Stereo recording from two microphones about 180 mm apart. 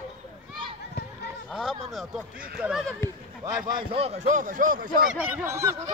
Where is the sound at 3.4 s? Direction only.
25° right (ahead or behind); by 4.9 s 50° right (ahead or behind).